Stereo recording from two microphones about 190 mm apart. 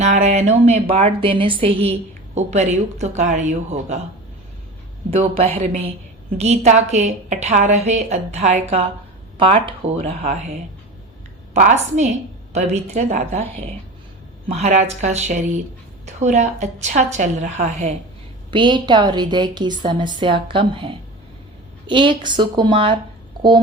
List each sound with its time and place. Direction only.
0.0 s a woman's voice: 35° right (ahead or behind)
5.1 s a woman's voice: 30° right (ahead or behind)
11.5 s a woman's voice: 40° right (ahead or behind)
18.5 s a woman's voice: 25° right (ahead or behind)